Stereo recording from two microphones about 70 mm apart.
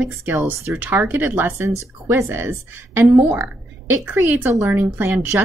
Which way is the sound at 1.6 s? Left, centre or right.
Right.